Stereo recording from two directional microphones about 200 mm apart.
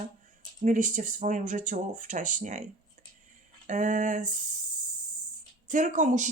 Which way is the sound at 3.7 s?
40° right (ahead or behind).